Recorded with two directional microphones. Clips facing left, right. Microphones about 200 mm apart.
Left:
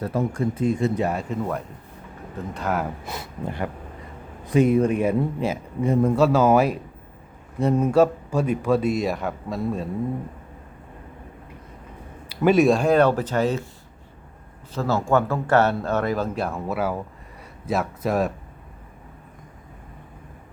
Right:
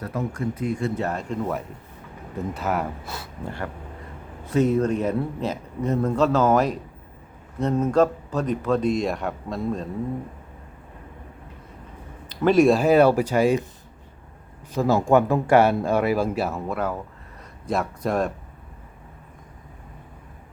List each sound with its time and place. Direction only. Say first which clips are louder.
0.0 s speech: left 4 dB; 30° left (ahead or behind); by 1.4 s 10° left (ahead or behind)
2.5 s speech: left 1 dB; 5° right (ahead or behind)
3.1 s speech: left 3 dB; 20° left (ahead or behind)
12.3 s speech: even; 5° left (ahead or behind); by 13.7 s 10° right (ahead or behind)
14.7 s speech: right 3 dB; 15° right (ahead or behind); by 18.3 s 5° left (ahead or behind)